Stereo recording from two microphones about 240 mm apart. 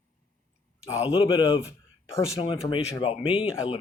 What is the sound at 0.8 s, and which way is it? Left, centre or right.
Speech, left.